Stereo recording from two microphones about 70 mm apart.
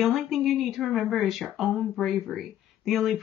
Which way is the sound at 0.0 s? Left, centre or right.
Centre.